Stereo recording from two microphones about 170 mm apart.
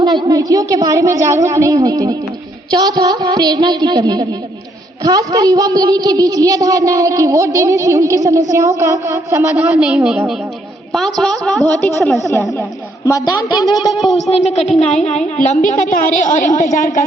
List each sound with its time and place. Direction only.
0.0 s a woman's voice: 25° right (ahead or behind)
9.7 s a woman's voice: 5° right (ahead or behind)
13.1 s a woman's voice: 20° left (ahead or behind)
14.3 s a woman's voice: 40° left (ahead or behind)